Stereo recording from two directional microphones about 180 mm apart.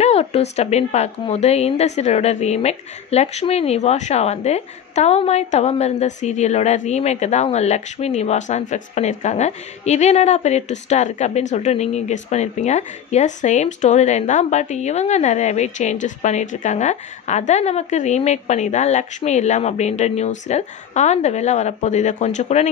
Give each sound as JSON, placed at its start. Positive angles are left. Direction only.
{"t": 0.0, "sound": "a woman's voice", "side_deg": 35}